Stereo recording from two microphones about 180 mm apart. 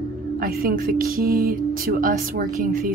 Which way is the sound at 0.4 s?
55° right (ahead or behind).